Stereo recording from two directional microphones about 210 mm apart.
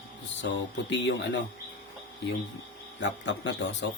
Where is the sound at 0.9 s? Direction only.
55° left (ahead or behind).